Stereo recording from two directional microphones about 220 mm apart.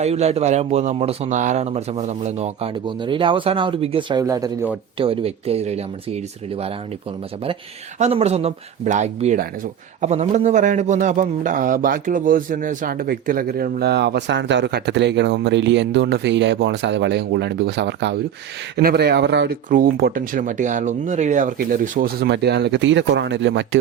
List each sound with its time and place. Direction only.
0.0 s a man's voice: 30° right (ahead or behind)
4.9 s a man's voice: 25° right (ahead or behind)
7.9 s a man's voice: 30° right (ahead or behind); by 23.6 s 55° right (ahead or behind)